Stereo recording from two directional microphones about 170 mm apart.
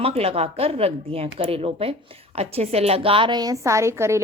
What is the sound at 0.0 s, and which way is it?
Speech, 35° right (ahead or behind).